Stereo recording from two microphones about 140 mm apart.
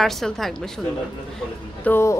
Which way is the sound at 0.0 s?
Centre (ahead or behind).